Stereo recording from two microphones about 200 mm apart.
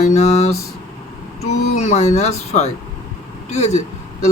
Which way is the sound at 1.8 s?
35° left (ahead or behind).